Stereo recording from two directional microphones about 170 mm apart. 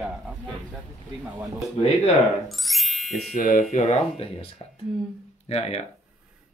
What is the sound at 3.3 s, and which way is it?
Speech, 55° left (ahead or behind).